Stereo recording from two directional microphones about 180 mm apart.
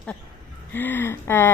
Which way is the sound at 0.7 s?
10° left (ahead or behind).